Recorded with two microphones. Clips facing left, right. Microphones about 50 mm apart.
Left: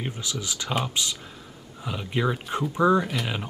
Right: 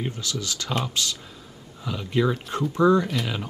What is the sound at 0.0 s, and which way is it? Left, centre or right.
Speech, centre.